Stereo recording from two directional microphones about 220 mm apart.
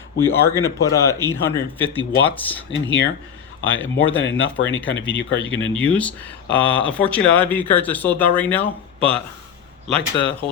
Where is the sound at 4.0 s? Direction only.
60° left (ahead or behind).